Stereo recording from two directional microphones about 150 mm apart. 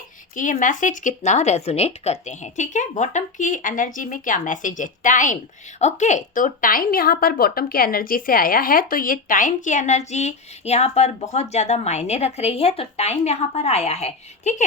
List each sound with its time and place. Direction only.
0.3 s speech: 60° left (ahead or behind)